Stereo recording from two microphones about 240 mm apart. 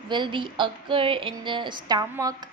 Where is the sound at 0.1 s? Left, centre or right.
Centre.